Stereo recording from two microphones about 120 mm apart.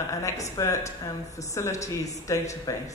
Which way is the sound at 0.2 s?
25° left (ahead or behind).